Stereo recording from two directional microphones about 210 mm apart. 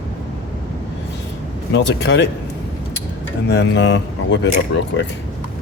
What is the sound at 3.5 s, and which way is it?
Speech, 55° left (ahead or behind).